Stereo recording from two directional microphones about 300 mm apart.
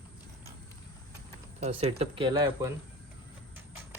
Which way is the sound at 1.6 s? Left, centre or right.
Centre.